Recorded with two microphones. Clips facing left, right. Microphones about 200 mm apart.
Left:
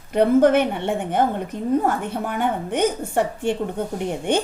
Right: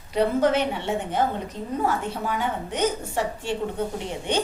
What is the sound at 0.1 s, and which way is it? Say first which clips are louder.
A woman's voice: left 6 dB; 55° left (ahead or behind).